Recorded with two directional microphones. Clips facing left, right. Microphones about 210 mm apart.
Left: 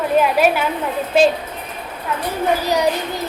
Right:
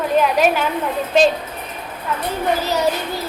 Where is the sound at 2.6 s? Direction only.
15° left (ahead or behind).